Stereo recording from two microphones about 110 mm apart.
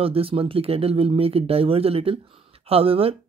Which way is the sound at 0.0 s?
60° right (ahead or behind).